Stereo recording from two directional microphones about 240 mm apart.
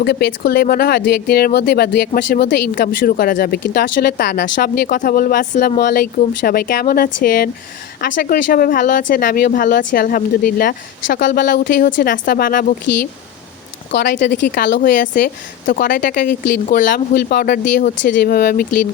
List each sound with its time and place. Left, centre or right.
0.0 s speech: left
13.9 s speech: left